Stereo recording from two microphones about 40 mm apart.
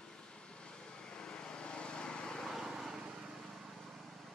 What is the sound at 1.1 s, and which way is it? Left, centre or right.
Vehicle, left.